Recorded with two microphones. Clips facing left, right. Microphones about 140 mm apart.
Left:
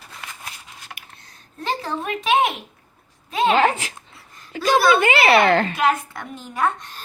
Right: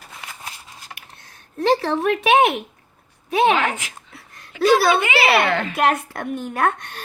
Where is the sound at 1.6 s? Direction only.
75° right (ahead or behind).